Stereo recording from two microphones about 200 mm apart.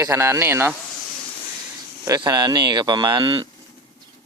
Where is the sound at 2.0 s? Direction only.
20° right (ahead or behind).